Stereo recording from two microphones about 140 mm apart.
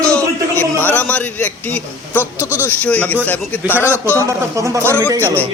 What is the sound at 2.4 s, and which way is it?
Speech, 15° right (ahead or behind).